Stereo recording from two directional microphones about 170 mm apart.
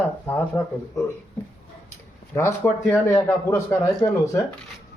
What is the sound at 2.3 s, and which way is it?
Speech, 15° left (ahead or behind).